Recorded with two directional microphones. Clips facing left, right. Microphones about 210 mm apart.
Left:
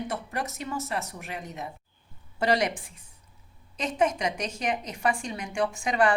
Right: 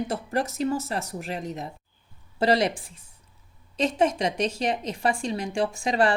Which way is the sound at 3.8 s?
30° right (ahead or behind).